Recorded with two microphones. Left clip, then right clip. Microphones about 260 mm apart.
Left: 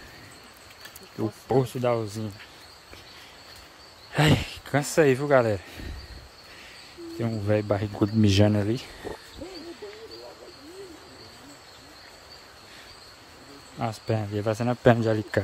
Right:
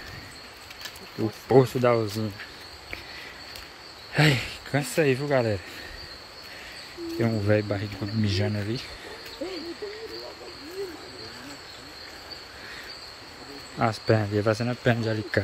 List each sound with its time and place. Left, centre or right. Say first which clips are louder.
1.5 s speech: right 5 dB; centre
4.1 s speech: even; centre
7.2 s speech: right 2 dB; centre
13.7 s speech: right 6 dB; centre